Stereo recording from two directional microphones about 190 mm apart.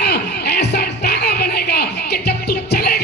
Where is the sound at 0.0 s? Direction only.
55° left (ahead or behind).